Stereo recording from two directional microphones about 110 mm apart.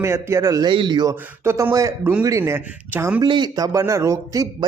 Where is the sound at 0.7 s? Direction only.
45° right (ahead or behind).